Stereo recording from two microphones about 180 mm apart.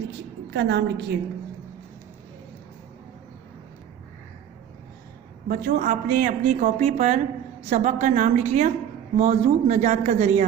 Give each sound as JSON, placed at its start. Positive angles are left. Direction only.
{"t": 0.5, "sound": "a woman's voice", "side_deg": -65}
{"t": 5.5, "sound": "a woman's voice", "side_deg": -50}